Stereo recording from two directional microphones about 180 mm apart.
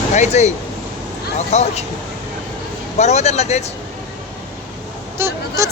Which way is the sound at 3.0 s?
40° left (ahead or behind).